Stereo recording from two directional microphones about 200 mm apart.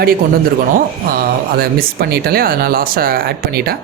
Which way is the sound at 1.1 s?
45° right (ahead or behind).